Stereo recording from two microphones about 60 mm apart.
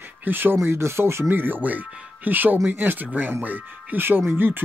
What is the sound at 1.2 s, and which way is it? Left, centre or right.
Speech, right.